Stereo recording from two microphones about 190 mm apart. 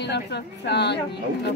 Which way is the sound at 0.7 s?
65° left (ahead or behind).